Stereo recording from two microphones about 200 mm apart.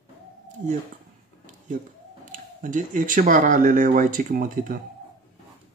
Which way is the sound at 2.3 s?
40° right (ahead or behind).